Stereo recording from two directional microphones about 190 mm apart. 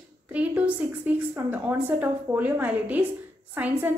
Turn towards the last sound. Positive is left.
turn(degrees=-10)  # may be behind; listen again after turning